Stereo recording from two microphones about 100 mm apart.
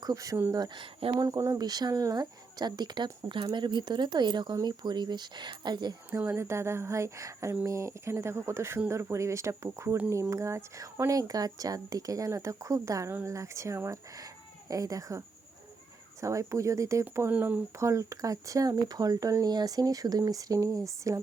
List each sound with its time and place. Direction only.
0.0 s speech: 40° right (ahead or behind)
0.8 s speech: 55° right (ahead or behind)
1.2 s speech: 35° right (ahead or behind)
6.1 s speech: 25° right (ahead or behind)
16.2 s speech: 30° right (ahead or behind)
17.3 s speech: 15° right (ahead or behind)
17.7 s speech: 30° right (ahead or behind)